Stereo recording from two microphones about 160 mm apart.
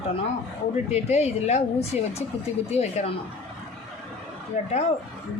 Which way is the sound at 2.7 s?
45° left (ahead or behind).